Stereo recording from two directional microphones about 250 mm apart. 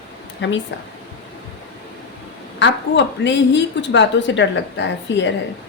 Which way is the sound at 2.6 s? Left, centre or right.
Left.